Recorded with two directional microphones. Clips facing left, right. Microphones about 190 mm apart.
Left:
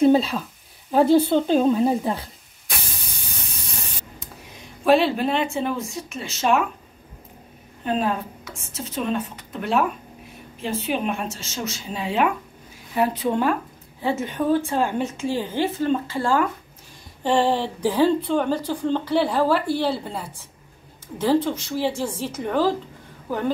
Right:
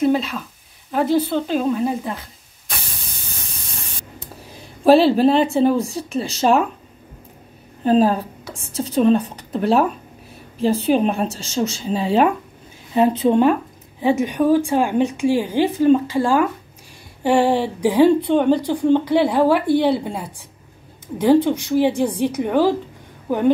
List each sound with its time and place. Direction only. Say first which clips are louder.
0.0 s speech: left 2 dB; 30° left (ahead or behind)
4.2 s speech: right 3 dB; 35° right (ahead or behind)
7.8 s a woman's voice: right 8 dB; 35° right (ahead or behind)
12.9 s speech: right 6 dB; 25° right (ahead or behind)